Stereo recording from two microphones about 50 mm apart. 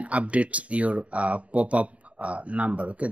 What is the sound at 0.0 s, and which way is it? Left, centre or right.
Speech, right.